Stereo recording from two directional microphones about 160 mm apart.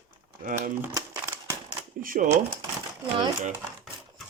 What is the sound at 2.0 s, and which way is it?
Speech, 60° right (ahead or behind).